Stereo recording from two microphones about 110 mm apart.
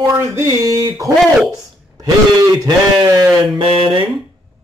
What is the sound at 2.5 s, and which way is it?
Speech, 35° right (ahead or behind).